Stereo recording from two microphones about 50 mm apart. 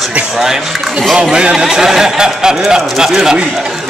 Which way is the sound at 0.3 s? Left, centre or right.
Centre.